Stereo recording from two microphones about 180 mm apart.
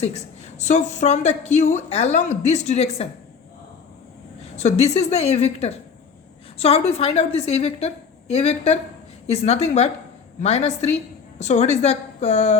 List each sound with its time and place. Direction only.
0.6 s a woman's voice: 40° left (ahead or behind)
4.5 s a woman's voice: 35° left (ahead or behind)